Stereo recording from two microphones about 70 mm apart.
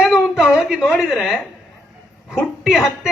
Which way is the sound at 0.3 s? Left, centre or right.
Centre.